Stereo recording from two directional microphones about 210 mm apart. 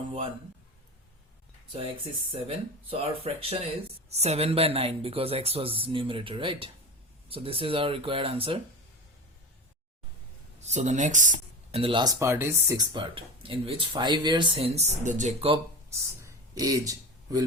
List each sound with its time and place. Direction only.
1.7 s speech: 25° right (ahead or behind)
10.6 s speech: 35° right (ahead or behind)
16.2 s a sound: 15° right (ahead or behind)